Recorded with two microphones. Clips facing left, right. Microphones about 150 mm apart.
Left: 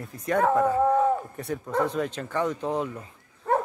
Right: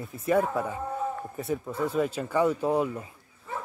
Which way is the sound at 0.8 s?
90° left.